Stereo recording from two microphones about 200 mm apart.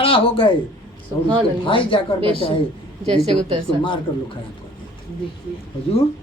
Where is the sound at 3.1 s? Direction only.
25° right (ahead or behind).